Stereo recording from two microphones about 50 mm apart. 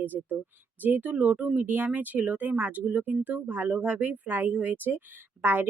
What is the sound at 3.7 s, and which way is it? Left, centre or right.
Speech, right.